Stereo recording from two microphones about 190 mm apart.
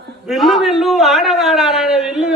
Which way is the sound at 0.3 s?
Centre (ahead or behind).